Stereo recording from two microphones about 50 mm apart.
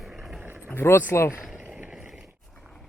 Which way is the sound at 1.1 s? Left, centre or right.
Left.